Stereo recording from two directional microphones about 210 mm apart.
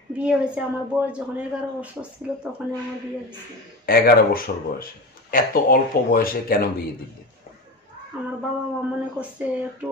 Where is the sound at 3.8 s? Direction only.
45° left (ahead or behind).